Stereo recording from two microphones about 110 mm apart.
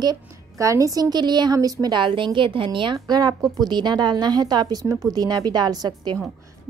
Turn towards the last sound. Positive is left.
turn(degrees=-40)  # may be behind; listen again after turning